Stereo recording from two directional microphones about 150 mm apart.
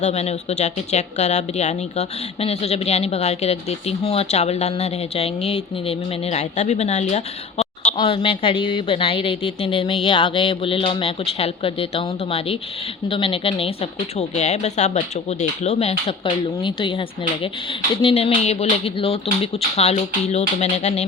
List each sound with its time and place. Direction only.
0.0 s speech: 45° left (ahead or behind)
7.9 s speech: 35° left (ahead or behind)
16.6 s speech: 30° left (ahead or behind)